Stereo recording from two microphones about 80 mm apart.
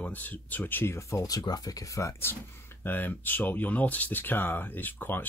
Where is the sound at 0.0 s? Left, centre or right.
Left.